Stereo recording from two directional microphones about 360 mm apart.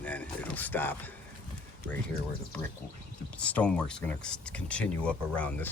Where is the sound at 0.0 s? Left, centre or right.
Centre.